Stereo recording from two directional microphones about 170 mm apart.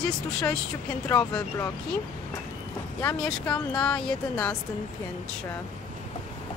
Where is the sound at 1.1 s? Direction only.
20° left (ahead or behind).